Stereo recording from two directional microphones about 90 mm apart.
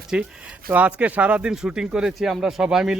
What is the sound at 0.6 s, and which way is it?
Speech, 15° right (ahead or behind).